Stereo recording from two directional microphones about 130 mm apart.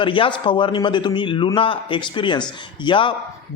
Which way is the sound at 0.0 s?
40° left (ahead or behind).